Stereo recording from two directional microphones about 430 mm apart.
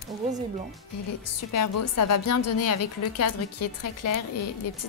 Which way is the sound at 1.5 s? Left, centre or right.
Left.